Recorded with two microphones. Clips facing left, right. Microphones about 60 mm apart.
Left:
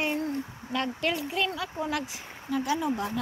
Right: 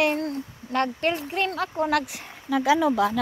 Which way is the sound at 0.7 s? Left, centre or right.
Right.